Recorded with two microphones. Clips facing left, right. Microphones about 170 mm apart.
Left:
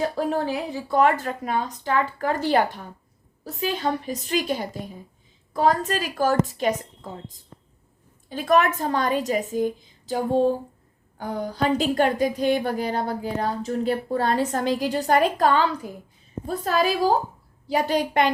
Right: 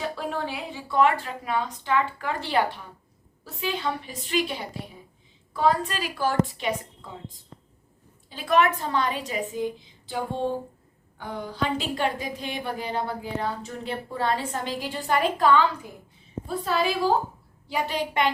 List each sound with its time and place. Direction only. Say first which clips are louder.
0.0 s a woman's voice: left 6 dB; 40° left (ahead or behind)